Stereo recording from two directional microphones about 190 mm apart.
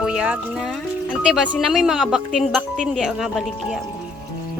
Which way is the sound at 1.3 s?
Centre (ahead or behind).